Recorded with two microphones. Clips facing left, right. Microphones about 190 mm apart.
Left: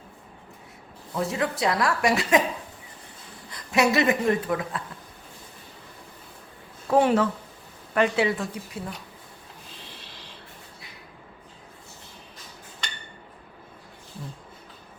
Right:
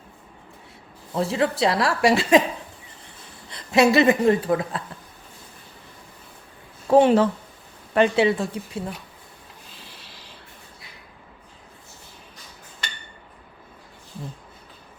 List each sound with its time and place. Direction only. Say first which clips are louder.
1.1 s a woman's voice: right 4 dB; 30° right (ahead or behind)
3.5 s a woman's voice: right 5 dB; 25° right (ahead or behind)
6.8 s a woman's voice: right 5 dB; 25° right (ahead or behind)